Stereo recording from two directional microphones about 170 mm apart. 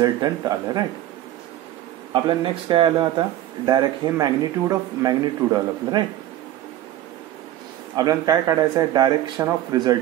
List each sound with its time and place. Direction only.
0.0 s speech: 25° right (ahead or behind)
2.2 s speech: 30° right (ahead or behind)
7.9 s speech: 20° right (ahead or behind)